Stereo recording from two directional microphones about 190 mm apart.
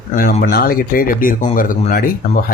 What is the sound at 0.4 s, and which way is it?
Speech, 50° left (ahead or behind).